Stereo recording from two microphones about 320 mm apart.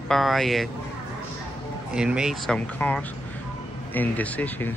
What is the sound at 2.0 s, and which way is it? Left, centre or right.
Speech, centre.